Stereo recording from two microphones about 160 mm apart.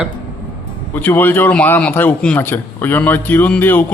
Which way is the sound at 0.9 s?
10° left (ahead or behind).